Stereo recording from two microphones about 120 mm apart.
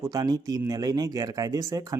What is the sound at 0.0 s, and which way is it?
Speech, 30° right (ahead or behind).